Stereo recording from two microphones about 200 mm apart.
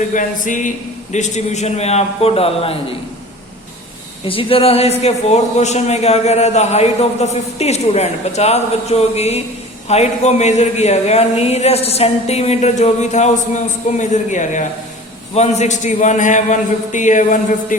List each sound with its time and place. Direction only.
0.1 s a man's voice: 40° left (ahead or behind)
4.3 s a man's voice: 25° left (ahead or behind)